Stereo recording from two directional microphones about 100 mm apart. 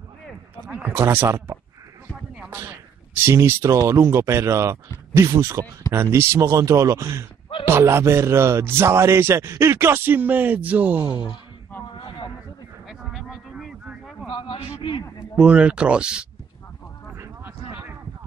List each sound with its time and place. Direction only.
0.7 s speech: 15° right (ahead or behind)
0.9 s speech: 25° right (ahead or behind)
3.2 s speech: 25° right (ahead or behind)
11.0 s speech: 40° right (ahead or behind)
12.8 s vehicle: centre (ahead or behind)
14.3 s a sound: 60° left (ahead or behind)
14.8 s a man's voice: 55° left (ahead or behind)
15.3 s speech: 10° right (ahead or behind)
17.2 s a sound: 20° right (ahead or behind)